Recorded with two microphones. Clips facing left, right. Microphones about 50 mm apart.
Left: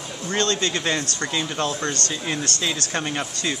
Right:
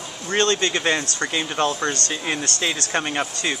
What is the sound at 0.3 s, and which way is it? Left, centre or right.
Speech, right.